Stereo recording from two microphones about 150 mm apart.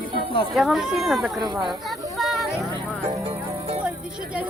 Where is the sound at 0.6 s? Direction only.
Centre (ahead or behind).